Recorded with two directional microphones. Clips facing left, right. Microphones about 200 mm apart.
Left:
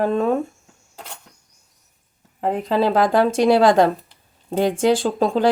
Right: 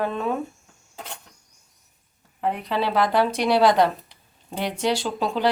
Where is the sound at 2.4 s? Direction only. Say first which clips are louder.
Left 6 dB; 45° left (ahead or behind).